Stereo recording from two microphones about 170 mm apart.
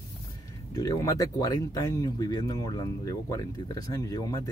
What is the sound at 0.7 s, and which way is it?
Speech, 20° left (ahead or behind).